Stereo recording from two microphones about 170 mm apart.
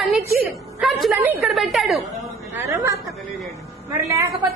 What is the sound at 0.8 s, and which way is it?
A woman's voice, centre (ahead or behind).